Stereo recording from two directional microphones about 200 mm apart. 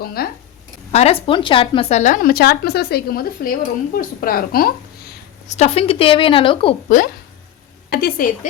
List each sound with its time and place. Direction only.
0.0 s speech: 50° left (ahead or behind)
0.9 s speech: 30° left (ahead or behind); by 4.7 s 45° left (ahead or behind)
5.5 s a woman's voice: 35° left (ahead or behind)
6.8 s a woman's voice: 45° left (ahead or behind)